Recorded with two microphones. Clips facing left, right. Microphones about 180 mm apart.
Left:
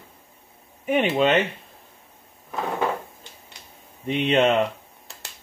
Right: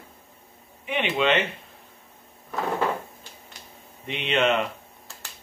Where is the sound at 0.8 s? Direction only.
40° left (ahead or behind).